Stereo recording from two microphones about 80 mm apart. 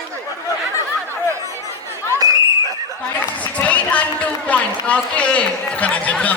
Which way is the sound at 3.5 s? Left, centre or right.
Centre.